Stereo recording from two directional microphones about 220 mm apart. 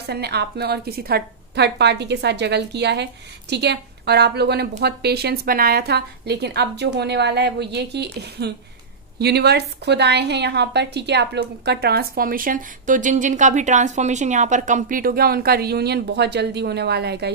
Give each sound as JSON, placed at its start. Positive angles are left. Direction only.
{"t": 0.0, "sound": "a woman's voice", "side_deg": -50}